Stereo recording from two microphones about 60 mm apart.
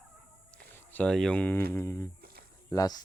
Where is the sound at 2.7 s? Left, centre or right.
Left.